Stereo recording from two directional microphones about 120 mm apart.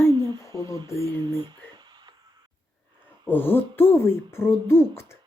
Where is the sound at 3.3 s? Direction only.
15° left (ahead or behind).